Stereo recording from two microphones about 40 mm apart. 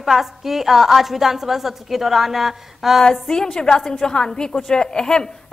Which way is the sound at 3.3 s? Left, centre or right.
Centre.